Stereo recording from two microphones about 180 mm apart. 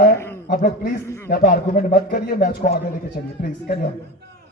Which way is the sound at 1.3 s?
55° left (ahead or behind).